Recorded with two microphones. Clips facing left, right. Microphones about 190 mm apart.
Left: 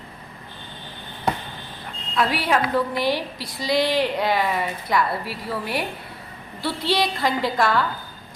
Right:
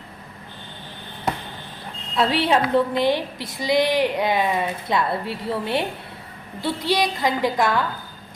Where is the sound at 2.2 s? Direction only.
25° right (ahead or behind).